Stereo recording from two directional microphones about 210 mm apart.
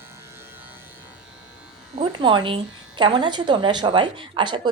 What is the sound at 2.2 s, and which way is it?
A woman's voice, 20° right (ahead or behind).